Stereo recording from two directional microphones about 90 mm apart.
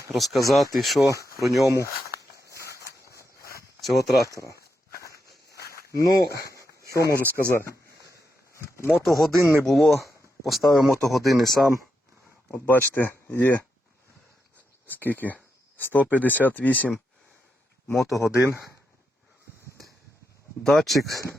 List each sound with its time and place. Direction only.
0.1 s speech: centre (ahead or behind)
1.6 s speech: 40° right (ahead or behind)
2.5 s walk: 35° right (ahead or behind)
3.8 s speech: centre (ahead or behind)
6.0 s speech: 40° left (ahead or behind)
6.6 s a sound: 35° right (ahead or behind)
8.6 s a sound: 30° left (ahead or behind)
9.0 s speech: centre (ahead or behind)
12.5 s speech: 20° left (ahead or behind)
14.8 s speech: 20° left (ahead or behind)
17.8 s speech: centre (ahead or behind)
18.3 s speech: 30° right (ahead or behind)
20.7 s speech: centre (ahead or behind)